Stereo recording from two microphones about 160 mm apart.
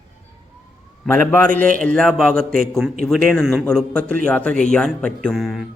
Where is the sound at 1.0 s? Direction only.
10° left (ahead or behind).